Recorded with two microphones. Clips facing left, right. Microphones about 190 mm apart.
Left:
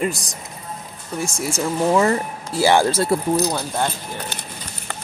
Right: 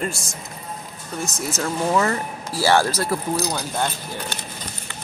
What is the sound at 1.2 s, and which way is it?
A woman's voice, 10° left (ahead or behind).